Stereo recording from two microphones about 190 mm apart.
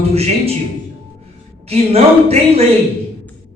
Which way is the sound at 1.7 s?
35° right (ahead or behind).